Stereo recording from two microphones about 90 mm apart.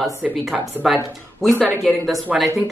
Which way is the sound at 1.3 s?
Centre (ahead or behind).